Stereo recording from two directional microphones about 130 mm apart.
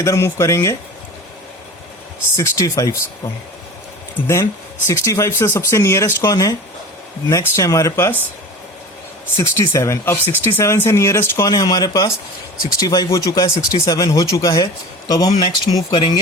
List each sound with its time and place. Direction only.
0.0 s speech: 20° left (ahead or behind)
2.3 s speech: 25° left (ahead or behind)
4.9 s speech: 25° left (ahead or behind)
9.4 s speech: 25° left (ahead or behind)